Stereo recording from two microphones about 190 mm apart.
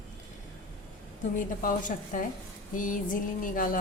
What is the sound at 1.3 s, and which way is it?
A woman's voice, 45° left (ahead or behind).